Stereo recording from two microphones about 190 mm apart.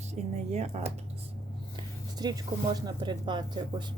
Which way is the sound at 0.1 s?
35° right (ahead or behind).